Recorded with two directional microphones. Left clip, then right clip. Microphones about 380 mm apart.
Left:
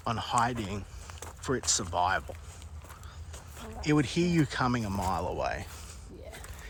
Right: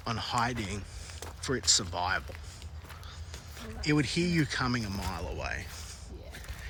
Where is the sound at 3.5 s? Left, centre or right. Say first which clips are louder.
Left 1 dB; centre.